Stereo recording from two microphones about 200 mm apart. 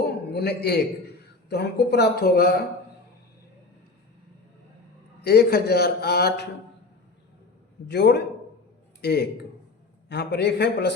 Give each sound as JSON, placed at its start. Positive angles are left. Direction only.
{"t": 0.0, "sound": "a sound", "side_deg": 55}
{"t": 1.5, "sound": "a man's voice", "side_deg": 55}
{"t": 5.2, "sound": "a man's voice", "side_deg": 55}
{"t": 7.9, "sound": "a man's voice", "side_deg": 55}